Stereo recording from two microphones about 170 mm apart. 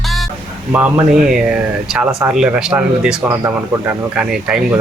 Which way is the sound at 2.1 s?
15° right (ahead or behind).